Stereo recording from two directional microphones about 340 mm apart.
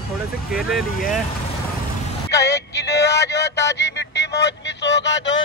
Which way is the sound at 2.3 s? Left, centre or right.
Left.